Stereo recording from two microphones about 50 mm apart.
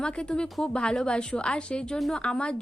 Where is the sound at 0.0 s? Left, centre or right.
Centre.